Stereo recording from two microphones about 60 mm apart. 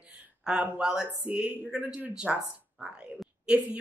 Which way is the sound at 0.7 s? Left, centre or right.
Centre.